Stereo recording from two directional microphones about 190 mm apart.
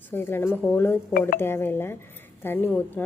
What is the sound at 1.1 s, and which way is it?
Speech, 45° left (ahead or behind).